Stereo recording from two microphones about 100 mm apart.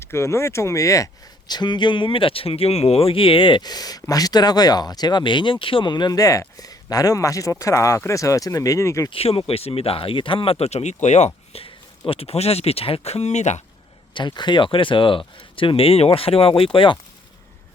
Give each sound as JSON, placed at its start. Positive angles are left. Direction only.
{"t": 0.0, "sound": "speech", "side_deg": 25}
{"t": 9.0, "sound": "speech", "side_deg": 70}
{"t": 9.5, "sound": "speech", "side_deg": 80}
{"t": 11.5, "sound": "speech", "side_deg": 70}
{"t": 14.1, "sound": "speech", "side_deg": 50}